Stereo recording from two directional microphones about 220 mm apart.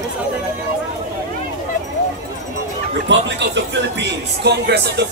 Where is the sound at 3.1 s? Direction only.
55° right (ahead or behind).